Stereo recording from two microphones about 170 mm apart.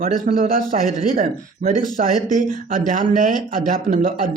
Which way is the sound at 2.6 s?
55° right (ahead or behind).